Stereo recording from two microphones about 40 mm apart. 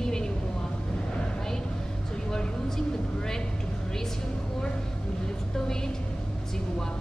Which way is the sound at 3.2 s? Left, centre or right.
Centre.